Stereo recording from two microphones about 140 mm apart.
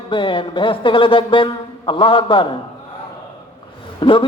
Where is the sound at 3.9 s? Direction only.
35° left (ahead or behind).